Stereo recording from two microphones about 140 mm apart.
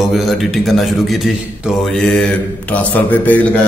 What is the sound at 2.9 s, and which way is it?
Speech, 10° left (ahead or behind).